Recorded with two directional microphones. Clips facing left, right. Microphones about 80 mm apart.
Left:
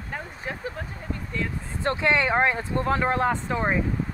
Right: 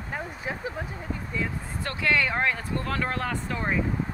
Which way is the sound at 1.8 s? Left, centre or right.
Left.